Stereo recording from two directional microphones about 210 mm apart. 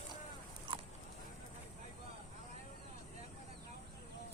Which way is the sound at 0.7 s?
20° right (ahead or behind).